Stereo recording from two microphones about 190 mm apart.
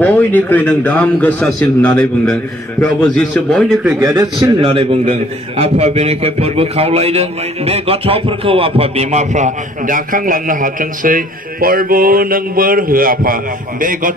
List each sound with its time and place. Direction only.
0.0 s a man's voice: 10° left (ahead or behind)
4.0 s a man's voice: 20° right (ahead or behind); by 14.1 s 45° right (ahead or behind)